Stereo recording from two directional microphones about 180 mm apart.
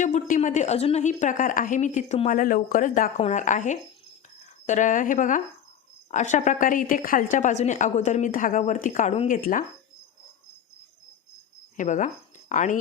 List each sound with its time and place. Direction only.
0.0 s a woman's voice: 45° left (ahead or behind)
11.8 s speech: 40° left (ahead or behind)